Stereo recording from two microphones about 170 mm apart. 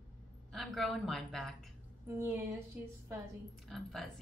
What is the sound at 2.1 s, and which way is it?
Speech, 15° right (ahead or behind).